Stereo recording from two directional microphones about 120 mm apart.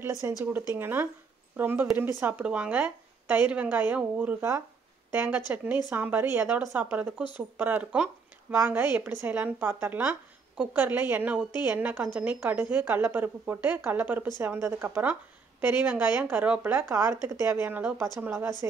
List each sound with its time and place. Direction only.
0.0 s a woman's voice: 25° right (ahead or behind)